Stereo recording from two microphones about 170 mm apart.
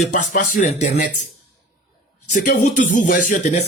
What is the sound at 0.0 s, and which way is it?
Speech, 45° left (ahead or behind).